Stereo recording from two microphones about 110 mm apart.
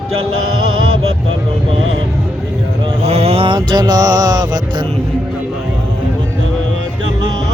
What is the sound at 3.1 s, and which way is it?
Mantra, 70° right (ahead or behind).